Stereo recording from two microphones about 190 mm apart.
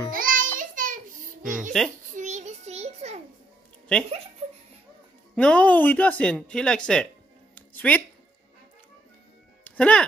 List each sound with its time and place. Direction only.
0.1 s music: 45° right (ahead or behind)
1.7 s speech: centre (ahead or behind)
2.1 s child singing: 40° right (ahead or behind)
4.4 s a sound: 35° right (ahead or behind)
5.3 s speech: 5° left (ahead or behind)
7.5 s a sound: 10° left (ahead or behind)
9.7 s speech: 5° left (ahead or behind)